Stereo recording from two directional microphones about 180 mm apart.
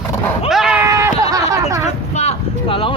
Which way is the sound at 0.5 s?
Centre (ahead or behind).